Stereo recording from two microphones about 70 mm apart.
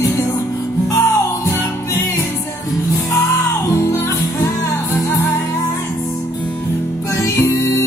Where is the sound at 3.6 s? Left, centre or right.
Left.